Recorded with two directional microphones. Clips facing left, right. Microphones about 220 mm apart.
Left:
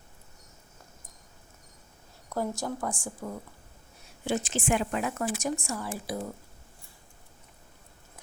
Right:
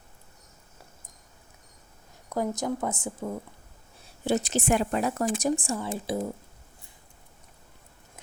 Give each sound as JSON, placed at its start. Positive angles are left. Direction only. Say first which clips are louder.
{"t": 2.3, "sound": "speech", "louder": "right 3 dB", "side_deg": -15}
{"t": 4.2, "sound": "a woman's voice", "louder": "right 4 dB", "side_deg": -35}